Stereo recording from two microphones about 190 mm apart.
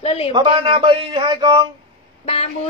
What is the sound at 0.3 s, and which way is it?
Speech, 25° right (ahead or behind).